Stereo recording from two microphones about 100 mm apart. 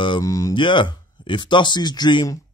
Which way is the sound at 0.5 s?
55° left (ahead or behind).